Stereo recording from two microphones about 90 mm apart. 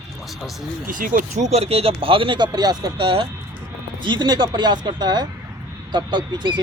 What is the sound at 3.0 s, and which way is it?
Speech, 75° right (ahead or behind).